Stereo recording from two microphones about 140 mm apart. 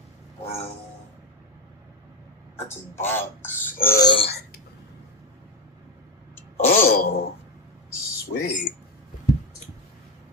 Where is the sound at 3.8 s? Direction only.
90° left.